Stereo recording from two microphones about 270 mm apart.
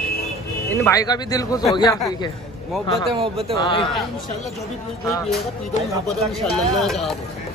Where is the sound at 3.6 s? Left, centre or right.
Centre.